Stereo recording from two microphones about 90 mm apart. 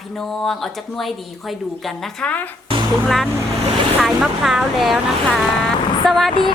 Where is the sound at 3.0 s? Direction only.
Centre (ahead or behind).